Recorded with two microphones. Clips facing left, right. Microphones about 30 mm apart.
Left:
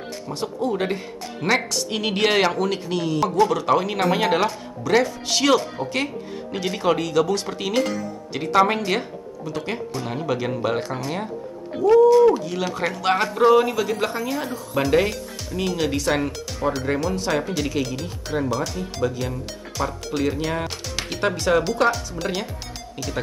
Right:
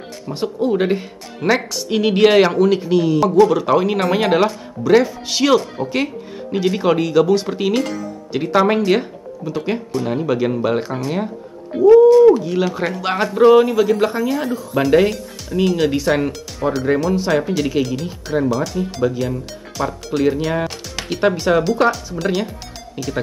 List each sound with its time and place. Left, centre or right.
0.3 s speech: right
1.4 s speech: centre
13.4 s speech: centre